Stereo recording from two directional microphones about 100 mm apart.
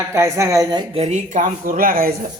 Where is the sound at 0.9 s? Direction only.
85° right.